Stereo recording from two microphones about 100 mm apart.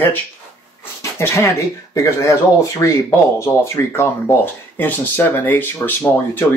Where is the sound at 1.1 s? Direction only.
25° left (ahead or behind).